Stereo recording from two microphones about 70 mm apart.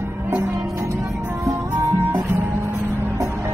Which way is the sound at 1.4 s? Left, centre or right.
Right.